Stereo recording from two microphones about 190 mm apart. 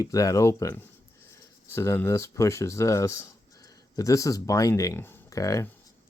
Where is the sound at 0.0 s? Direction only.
15° left (ahead or behind).